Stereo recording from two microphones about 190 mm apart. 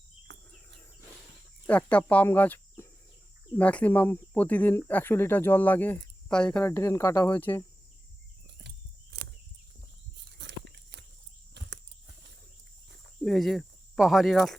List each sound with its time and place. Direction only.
0.3 s cricket: 70° right (ahead or behind)
1.6 s speech: 10° left (ahead or behind)
9.1 s a sound: 60° right (ahead or behind)
10.3 s biting: 65° right (ahead or behind)
13.2 s speech: centre (ahead or behind)